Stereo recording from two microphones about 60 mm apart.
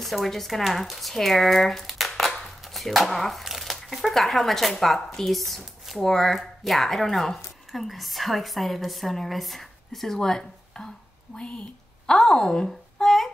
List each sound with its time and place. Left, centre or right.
0.0 s a woman's voice: centre
12.6 s babbling: centre